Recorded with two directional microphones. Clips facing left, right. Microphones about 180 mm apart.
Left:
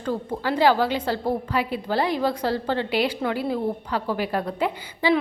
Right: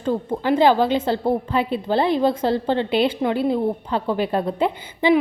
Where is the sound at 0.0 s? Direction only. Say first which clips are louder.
Right 4 dB; 20° right (ahead or behind).